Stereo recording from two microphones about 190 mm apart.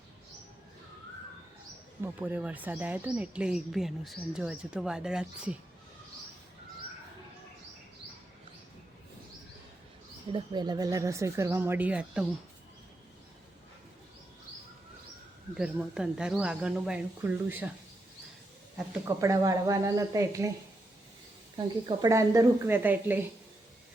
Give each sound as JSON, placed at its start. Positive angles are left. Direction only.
{"t": 2.1, "sound": "speech", "side_deg": -10}
{"t": 10.3, "sound": "speech", "side_deg": -20}
{"t": 15.5, "sound": "speech", "side_deg": -5}
{"t": 18.8, "sound": "speech", "side_deg": -15}
{"t": 21.8, "sound": "speech", "side_deg": -20}